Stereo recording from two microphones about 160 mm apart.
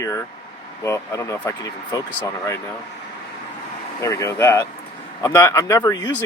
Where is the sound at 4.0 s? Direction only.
20° left (ahead or behind).